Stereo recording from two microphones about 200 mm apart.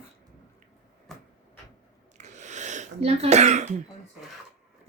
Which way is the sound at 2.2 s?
35° right (ahead or behind).